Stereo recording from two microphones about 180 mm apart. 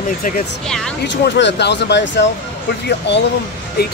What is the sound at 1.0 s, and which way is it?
Speech, 75° left (ahead or behind).